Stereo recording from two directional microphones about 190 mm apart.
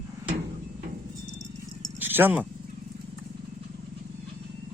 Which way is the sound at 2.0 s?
10° right (ahead or behind).